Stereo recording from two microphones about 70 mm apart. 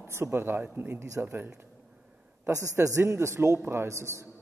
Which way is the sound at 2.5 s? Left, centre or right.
Right.